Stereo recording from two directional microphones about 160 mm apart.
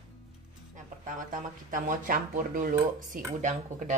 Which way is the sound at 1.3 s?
55° right (ahead or behind).